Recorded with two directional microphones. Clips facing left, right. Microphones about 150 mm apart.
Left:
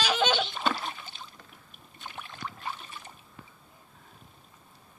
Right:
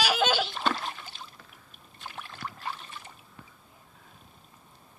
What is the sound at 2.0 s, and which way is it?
Boat, centre (ahead or behind).